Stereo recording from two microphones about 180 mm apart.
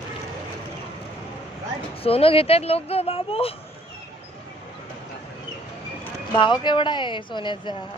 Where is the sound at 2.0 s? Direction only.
30° left (ahead or behind).